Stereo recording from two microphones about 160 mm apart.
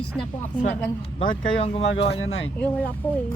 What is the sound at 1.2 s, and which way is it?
Speech, 35° left (ahead or behind).